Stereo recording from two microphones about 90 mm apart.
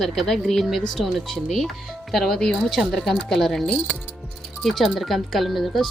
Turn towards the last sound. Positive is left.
turn(degrees=0)  # may be behind; listen again after turning